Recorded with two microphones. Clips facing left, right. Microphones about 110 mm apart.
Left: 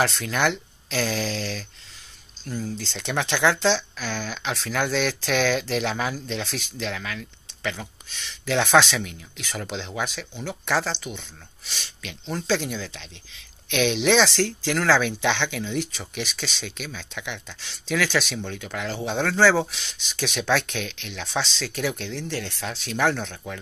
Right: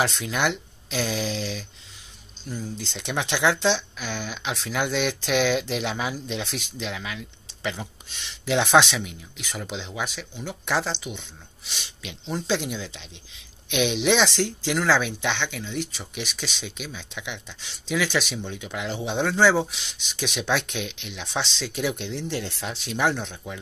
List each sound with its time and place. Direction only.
0.0 s speech: 10° right (ahead or behind)